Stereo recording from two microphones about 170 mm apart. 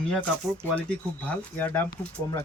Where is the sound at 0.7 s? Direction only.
10° left (ahead or behind).